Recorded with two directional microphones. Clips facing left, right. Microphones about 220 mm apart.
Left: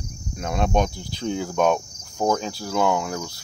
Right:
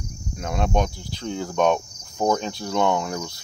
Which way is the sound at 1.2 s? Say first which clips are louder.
Even; 10° left (ahead or behind).